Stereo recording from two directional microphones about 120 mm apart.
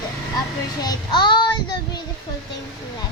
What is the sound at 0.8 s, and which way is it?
Child singing, 35° left (ahead or behind).